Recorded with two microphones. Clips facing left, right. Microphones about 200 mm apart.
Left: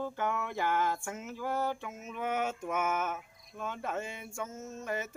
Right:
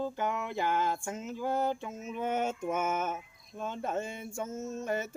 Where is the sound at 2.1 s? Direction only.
25° right (ahead or behind).